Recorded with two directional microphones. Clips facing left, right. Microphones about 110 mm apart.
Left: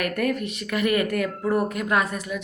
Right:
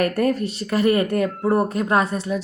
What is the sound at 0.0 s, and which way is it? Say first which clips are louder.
A woman's voice: right 5 dB; 35° right (ahead or behind).